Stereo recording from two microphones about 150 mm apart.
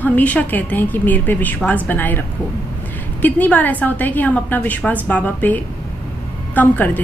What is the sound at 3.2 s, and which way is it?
A woman's voice, 10° left (ahead or behind).